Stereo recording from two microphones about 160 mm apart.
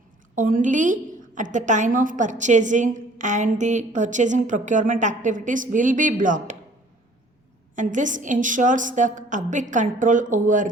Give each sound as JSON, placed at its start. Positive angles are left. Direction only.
{"t": 0.3, "sound": "a woman's voice", "side_deg": -55}
{"t": 7.8, "sound": "a woman's voice", "side_deg": -55}